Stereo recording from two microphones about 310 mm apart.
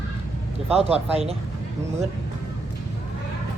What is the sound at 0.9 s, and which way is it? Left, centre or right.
Speech, centre.